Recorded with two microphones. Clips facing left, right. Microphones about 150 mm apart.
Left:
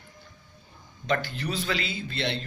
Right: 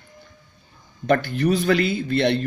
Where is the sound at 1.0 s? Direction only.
55° right (ahead or behind).